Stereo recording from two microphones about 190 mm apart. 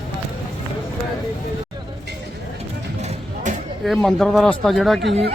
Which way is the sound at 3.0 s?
35° right (ahead or behind).